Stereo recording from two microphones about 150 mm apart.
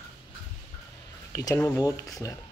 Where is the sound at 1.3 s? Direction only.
25° left (ahead or behind).